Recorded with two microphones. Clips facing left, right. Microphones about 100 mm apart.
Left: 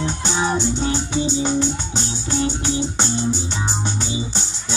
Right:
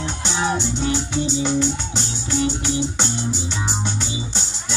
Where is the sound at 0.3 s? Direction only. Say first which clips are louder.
Left 1 dB; 10° left (ahead or behind).